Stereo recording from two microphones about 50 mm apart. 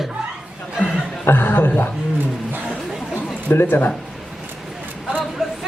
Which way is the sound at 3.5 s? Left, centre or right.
Left.